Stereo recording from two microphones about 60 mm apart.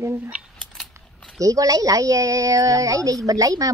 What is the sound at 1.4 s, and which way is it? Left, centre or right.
A woman's voice, right.